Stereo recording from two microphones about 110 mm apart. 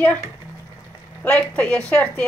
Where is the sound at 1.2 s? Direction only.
10° left (ahead or behind).